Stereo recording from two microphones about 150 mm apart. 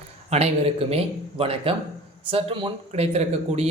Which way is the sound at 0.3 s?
45° right (ahead or behind).